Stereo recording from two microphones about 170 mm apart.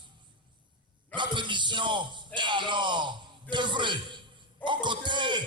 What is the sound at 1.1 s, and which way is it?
Speech, 30° right (ahead or behind).